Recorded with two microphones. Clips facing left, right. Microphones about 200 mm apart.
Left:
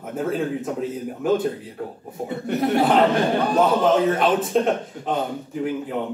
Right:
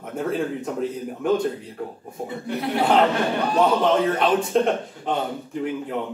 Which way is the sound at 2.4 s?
45° left (ahead or behind).